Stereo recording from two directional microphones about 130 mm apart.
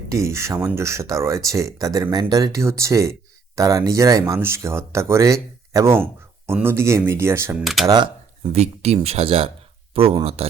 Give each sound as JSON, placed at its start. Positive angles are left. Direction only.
{"t": 0.1, "sound": "speech", "side_deg": -20}
{"t": 7.6, "sound": "speech", "side_deg": 0}
{"t": 7.9, "sound": "speech", "side_deg": -35}
{"t": 8.4, "sound": "speech", "side_deg": -55}